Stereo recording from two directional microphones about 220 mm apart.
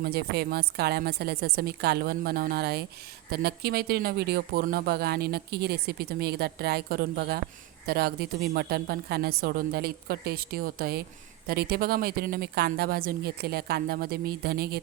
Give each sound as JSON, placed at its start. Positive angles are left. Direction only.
{"t": 0.0, "sound": "speech", "side_deg": -45}